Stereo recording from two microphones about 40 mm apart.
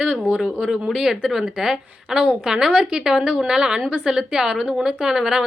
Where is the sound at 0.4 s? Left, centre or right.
Centre.